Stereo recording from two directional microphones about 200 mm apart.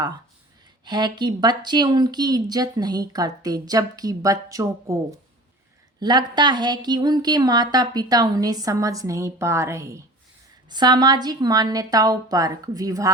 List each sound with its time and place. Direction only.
0.9 s a woman's voice: 20° right (ahead or behind)
6.0 s a woman's voice: 20° right (ahead or behind)